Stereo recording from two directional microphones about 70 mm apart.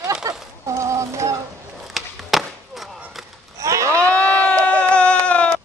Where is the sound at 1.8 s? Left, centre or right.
Centre.